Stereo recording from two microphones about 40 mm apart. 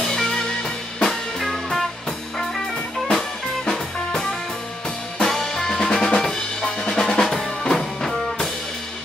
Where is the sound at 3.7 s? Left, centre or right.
Centre.